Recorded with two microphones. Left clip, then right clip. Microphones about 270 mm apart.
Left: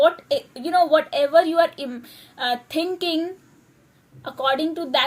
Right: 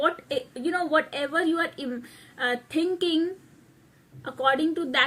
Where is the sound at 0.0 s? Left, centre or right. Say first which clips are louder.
Left 8 dB; centre.